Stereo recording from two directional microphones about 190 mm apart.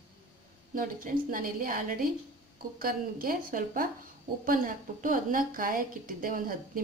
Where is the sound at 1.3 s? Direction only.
50° right (ahead or behind).